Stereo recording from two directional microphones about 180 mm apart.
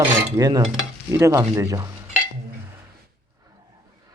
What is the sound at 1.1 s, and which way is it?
Speech, 15° right (ahead or behind).